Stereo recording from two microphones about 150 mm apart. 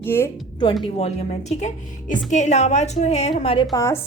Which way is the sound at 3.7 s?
20° left (ahead or behind).